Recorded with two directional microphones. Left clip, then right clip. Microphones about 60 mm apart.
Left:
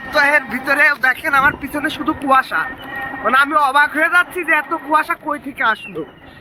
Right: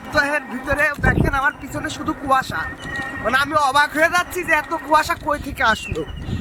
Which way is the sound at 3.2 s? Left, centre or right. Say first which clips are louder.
Left 4 dB; centre.